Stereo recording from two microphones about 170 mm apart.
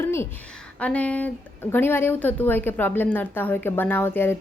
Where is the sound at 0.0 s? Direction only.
15° left (ahead or behind).